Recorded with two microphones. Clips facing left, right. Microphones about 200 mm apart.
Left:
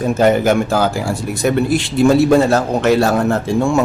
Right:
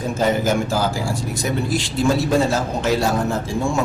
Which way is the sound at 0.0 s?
65° left (ahead or behind).